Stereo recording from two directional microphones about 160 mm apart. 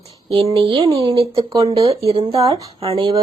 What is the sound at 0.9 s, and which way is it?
Speech, 20° right (ahead or behind).